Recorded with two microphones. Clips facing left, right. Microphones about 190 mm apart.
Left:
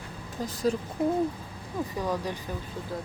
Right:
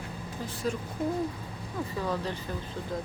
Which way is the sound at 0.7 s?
35° left (ahead or behind).